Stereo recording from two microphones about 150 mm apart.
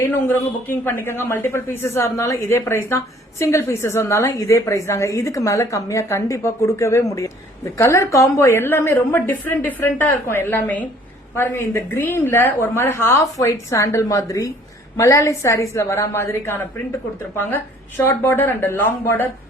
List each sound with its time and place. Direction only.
0.0 s a woman's voice: 15° left (ahead or behind)